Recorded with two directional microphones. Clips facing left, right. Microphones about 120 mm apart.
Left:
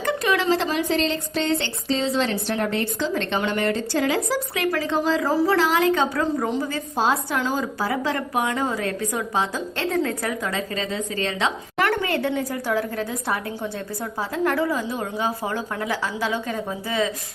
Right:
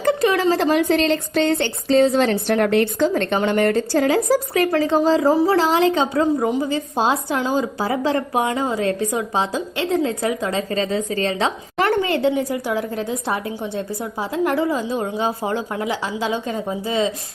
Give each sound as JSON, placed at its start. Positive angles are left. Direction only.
{"t": 0.0, "sound": "speech", "side_deg": -35}
{"t": 4.7, "sound": "a woman's voice", "side_deg": -30}